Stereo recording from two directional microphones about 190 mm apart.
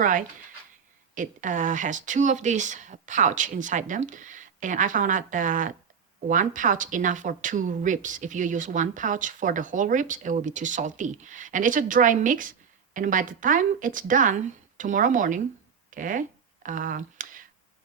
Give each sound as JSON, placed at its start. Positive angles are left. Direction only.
{"t": 0.0, "sound": "speech", "side_deg": -45}